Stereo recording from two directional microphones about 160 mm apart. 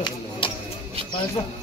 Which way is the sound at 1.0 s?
35° right (ahead or behind).